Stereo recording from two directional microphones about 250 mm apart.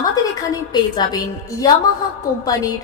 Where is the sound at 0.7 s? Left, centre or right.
Centre.